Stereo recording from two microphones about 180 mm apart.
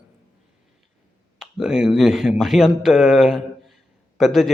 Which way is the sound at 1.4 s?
5° right (ahead or behind).